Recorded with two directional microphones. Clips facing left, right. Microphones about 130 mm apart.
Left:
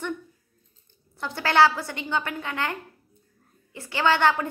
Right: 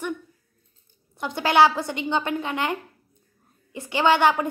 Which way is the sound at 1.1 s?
15° right (ahead or behind).